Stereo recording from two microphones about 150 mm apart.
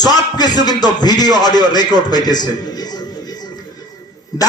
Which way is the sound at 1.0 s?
25° left (ahead or behind).